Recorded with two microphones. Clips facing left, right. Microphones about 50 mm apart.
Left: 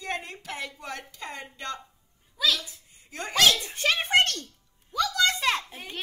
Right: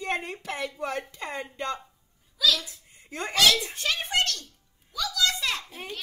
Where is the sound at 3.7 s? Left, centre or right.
Left.